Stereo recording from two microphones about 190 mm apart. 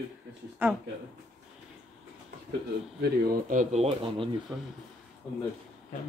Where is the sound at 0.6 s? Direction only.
10° right (ahead or behind).